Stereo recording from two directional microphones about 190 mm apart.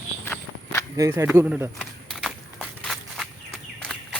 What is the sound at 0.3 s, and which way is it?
Walk, 15° left (ahead or behind).